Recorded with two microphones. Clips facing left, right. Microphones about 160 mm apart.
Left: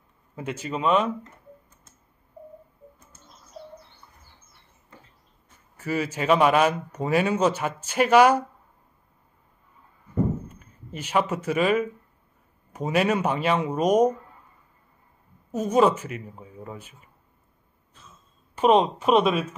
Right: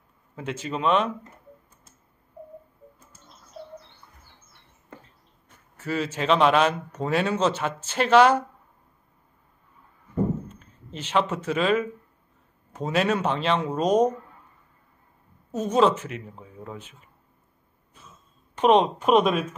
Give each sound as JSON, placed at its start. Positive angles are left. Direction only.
{"t": 0.4, "sound": "a man's voice", "side_deg": 10}
{"t": 4.9, "sound": "a sound", "side_deg": -55}
{"t": 5.8, "sound": "a man's voice", "side_deg": 10}
{"t": 10.5, "sound": "a man's voice", "side_deg": 10}
{"t": 15.5, "sound": "a man's voice", "side_deg": 10}
{"t": 18.5, "sound": "speech", "side_deg": 5}